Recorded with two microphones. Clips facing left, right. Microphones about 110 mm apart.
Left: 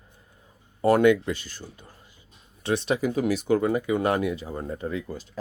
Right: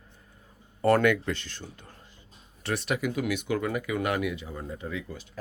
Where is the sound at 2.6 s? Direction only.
20° left (ahead or behind).